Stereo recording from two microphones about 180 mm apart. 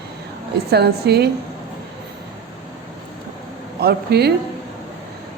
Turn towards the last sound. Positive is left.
turn(degrees=-65)  # may be behind; listen again after turning